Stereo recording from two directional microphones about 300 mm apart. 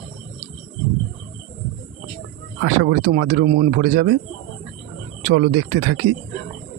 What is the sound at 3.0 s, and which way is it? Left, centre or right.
Speech, right.